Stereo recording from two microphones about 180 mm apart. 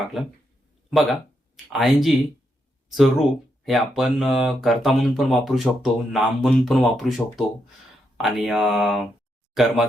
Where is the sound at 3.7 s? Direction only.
Centre (ahead or behind).